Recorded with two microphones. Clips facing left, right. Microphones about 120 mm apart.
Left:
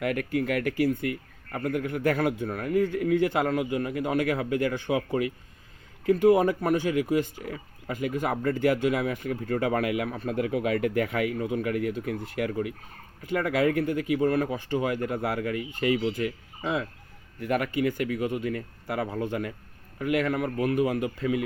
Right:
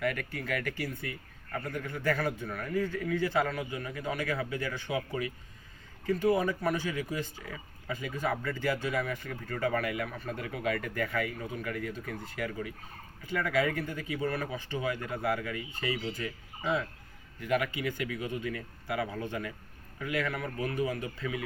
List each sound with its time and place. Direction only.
0.0 s speech: 55° left (ahead or behind)
2.7 s speech: 15° left (ahead or behind)
3.2 s speech: 55° left (ahead or behind)
6.2 s speech: 65° left (ahead or behind)
17.4 s speech: 50° left (ahead or behind)
20.4 s speech: 65° left (ahead or behind)